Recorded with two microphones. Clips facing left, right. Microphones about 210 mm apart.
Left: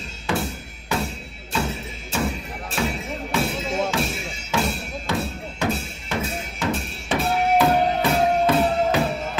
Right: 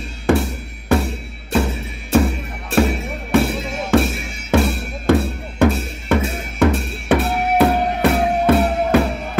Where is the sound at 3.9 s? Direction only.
55° right (ahead or behind).